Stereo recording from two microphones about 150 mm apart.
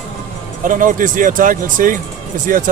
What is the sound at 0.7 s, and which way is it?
Speech, 65° right (ahead or behind).